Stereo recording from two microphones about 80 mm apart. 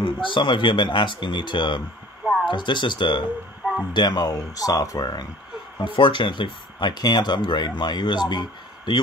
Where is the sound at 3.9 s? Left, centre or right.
Left.